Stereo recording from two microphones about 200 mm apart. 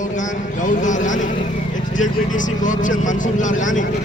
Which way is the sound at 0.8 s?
40° left (ahead or behind).